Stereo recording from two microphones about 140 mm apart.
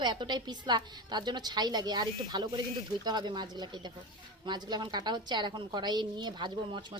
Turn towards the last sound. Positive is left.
turn(degrees=-30)  # may be behind; listen again after turning